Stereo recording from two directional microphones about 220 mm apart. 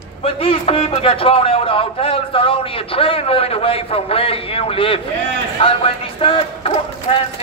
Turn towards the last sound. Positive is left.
turn(degrees=25)  # may be behind; listen again after turning